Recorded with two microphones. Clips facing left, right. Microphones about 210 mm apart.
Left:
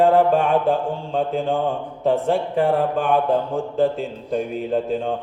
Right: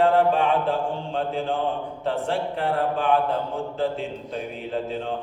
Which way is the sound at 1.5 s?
15° left (ahead or behind).